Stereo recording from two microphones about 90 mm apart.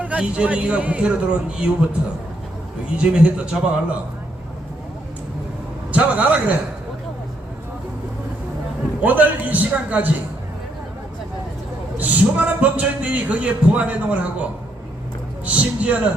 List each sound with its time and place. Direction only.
0.0 s speech: 15° right (ahead or behind)
3.0 s speech: 15° right (ahead or behind)
5.9 s speech: 15° right (ahead or behind)
9.0 s speech: 20° right (ahead or behind)
11.9 s speech: 20° right (ahead or behind)
15.4 s speech: 15° right (ahead or behind)